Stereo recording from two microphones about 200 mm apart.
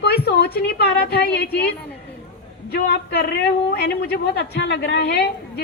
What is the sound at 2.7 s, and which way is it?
A woman's voice, 50° left (ahead or behind).